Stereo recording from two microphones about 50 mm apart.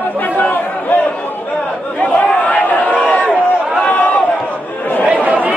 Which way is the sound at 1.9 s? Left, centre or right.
Left.